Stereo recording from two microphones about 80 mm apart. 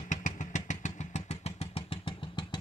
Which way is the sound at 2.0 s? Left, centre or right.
Left.